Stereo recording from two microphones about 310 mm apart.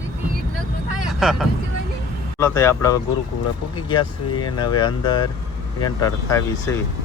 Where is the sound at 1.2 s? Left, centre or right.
Centre.